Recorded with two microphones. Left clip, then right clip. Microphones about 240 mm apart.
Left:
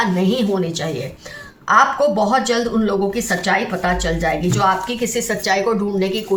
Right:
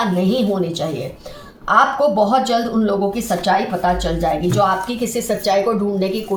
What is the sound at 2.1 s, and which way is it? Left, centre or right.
Speech, left.